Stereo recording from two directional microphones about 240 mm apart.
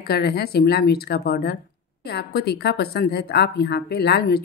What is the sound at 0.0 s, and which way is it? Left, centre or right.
A woman's voice, left.